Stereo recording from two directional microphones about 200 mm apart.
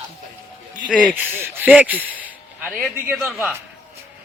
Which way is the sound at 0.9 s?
Centre (ahead or behind).